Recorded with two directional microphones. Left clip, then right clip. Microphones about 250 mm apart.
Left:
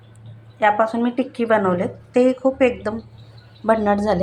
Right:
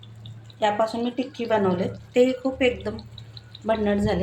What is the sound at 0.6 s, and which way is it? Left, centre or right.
A woman's voice, centre.